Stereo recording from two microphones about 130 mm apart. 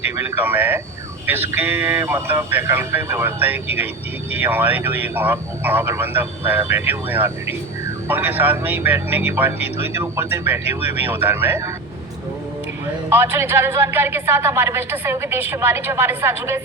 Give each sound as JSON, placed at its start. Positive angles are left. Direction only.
{"t": 0.0, "sound": "speech", "side_deg": -15}
{"t": 13.1, "sound": "speech", "side_deg": -15}